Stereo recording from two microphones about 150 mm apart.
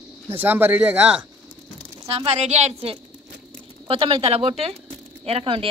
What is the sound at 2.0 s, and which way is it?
A woman's voice, 45° right (ahead or behind).